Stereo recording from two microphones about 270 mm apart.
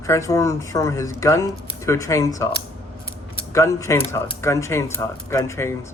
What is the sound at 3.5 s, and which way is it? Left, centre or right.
Speech, centre.